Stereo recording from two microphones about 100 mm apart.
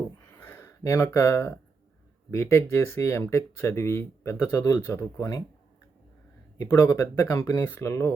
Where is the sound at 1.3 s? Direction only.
30° left (ahead or behind).